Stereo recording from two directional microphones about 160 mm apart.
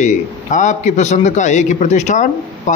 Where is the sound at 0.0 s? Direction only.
50° left (ahead or behind).